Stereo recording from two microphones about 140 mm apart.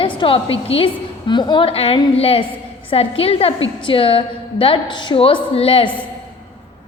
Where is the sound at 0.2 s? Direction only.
40° left (ahead or behind).